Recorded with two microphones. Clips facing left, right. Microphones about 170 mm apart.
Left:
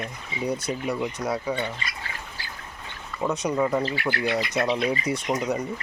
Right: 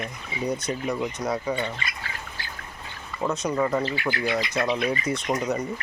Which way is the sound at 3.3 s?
10° left (ahead or behind).